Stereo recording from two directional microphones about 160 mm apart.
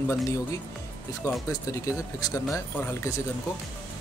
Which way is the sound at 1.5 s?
20° left (ahead or behind).